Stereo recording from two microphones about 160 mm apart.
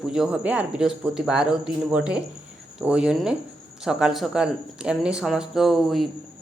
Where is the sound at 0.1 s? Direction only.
5° right (ahead or behind).